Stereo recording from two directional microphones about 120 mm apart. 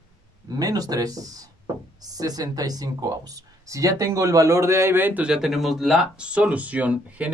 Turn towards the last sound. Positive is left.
turn(degrees=-10)  # may be behind; listen again after turning